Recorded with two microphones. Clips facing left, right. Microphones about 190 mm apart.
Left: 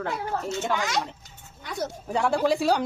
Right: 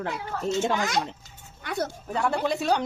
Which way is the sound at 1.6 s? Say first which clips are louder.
Right 4 dB; 65° right (ahead or behind).